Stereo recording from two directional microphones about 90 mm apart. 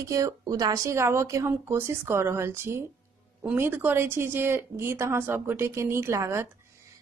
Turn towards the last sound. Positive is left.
turn(degrees=-30)  # may be behind; listen again after turning